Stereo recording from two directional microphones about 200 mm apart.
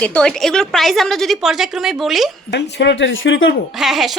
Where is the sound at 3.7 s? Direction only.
Centre (ahead or behind).